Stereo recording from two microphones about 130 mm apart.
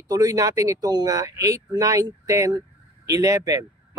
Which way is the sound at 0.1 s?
25° right (ahead or behind).